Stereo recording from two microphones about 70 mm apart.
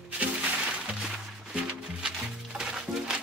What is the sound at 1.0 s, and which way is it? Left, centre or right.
Music, centre.